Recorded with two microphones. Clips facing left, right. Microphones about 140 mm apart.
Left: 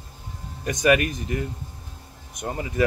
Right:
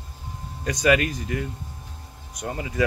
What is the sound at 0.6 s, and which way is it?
Speech, 25° left (ahead or behind).